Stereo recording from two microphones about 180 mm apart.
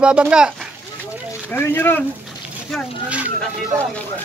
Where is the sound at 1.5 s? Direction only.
10° left (ahead or behind).